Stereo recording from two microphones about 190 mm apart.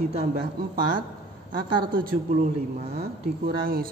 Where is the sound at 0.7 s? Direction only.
50° right (ahead or behind).